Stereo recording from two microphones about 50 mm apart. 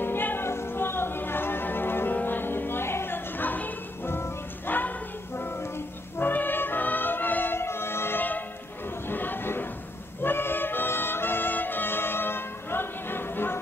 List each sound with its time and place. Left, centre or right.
0.0 s music: left
0.5 s music: left
7.5 s music: left
8.2 s music: left
9.0 s a sound: left
10.2 s music: left